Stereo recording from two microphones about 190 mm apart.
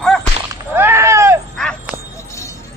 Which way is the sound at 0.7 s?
10° right (ahead or behind).